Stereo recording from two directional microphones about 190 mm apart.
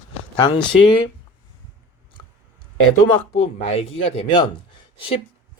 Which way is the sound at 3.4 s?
30° left (ahead or behind).